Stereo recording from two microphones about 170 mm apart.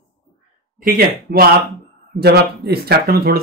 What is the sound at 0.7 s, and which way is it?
Speech, 60° right (ahead or behind).